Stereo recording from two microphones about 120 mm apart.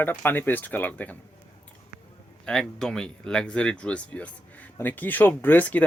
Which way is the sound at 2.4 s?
5° left (ahead or behind).